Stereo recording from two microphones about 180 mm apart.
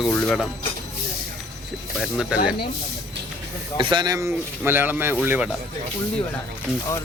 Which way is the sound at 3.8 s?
25° right (ahead or behind).